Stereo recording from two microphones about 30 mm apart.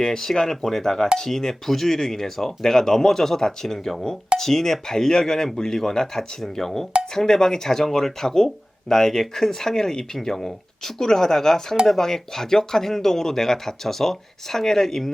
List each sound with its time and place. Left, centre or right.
0.0 s speech: centre